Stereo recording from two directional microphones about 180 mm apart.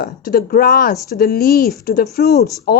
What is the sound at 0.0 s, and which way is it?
A woman's voice, 55° left (ahead or behind).